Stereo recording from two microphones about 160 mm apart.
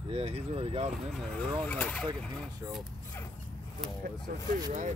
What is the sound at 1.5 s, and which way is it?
Speech, 10° left (ahead or behind).